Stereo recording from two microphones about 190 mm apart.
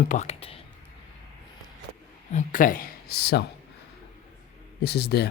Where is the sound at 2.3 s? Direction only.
40° left (ahead or behind); by 3.5 s 60° left (ahead or behind).